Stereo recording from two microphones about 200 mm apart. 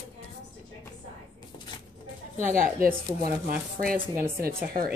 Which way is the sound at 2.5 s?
45° right (ahead or behind).